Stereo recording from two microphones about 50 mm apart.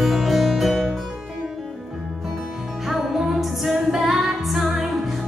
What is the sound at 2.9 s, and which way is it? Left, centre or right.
Music, centre.